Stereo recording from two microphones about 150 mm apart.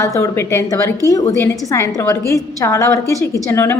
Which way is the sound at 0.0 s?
20° left (ahead or behind).